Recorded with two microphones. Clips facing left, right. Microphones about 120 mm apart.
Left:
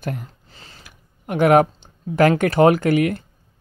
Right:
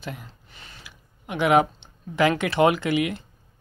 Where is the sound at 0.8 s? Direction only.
45° left (ahead or behind).